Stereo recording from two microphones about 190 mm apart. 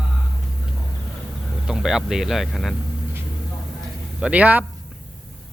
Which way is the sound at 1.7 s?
Centre (ahead or behind).